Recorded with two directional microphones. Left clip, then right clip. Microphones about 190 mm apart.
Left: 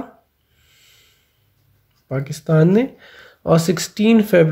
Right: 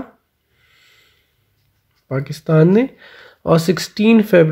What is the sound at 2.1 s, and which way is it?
Speech, 35° right (ahead or behind).